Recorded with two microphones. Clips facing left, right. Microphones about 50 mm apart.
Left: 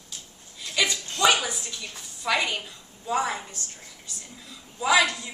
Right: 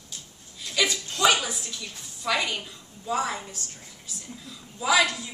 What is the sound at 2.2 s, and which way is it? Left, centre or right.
A woman's voice, centre.